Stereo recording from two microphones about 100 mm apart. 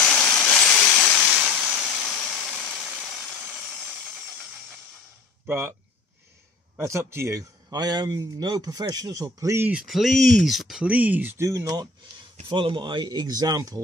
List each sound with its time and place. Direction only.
0.0 s a sound: 10° left (ahead or behind)
1.0 s a sound: centre (ahead or behind)
3.3 s sawing: 5° right (ahead or behind)
5.5 s speech: 25° right (ahead or behind)
6.8 s a man's voice: 25° right (ahead or behind)
9.8 s speech: centre (ahead or behind)
11.3 s speech: 30° right (ahead or behind)
12.4 s speech: 60° right (ahead or behind); by 13.8 s 35° right (ahead or behind)